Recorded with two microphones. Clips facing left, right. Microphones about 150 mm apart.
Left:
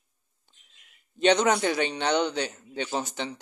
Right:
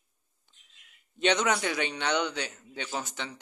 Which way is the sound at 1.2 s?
35° left (ahead or behind).